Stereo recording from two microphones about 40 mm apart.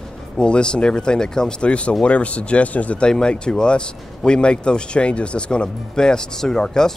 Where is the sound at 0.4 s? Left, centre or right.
Left.